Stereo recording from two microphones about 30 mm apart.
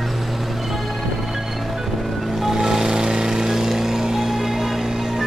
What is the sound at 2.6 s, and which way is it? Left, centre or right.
Vehicle, right.